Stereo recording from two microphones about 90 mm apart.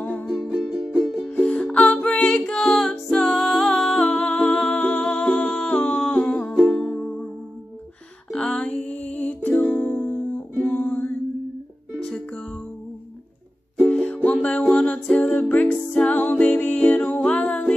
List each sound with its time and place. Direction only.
0.0 s music: 15° left (ahead or behind)
0.3 s music: centre (ahead or behind)
1.4 s music: 15° left (ahead or behind)
5.8 s humming: 15° left (ahead or behind)
6.6 s music: 5° left (ahead or behind)
8.3 s music: 10° left (ahead or behind)
12.0 s music: 5° left (ahead or behind)
13.8 s music: 10° left (ahead or behind)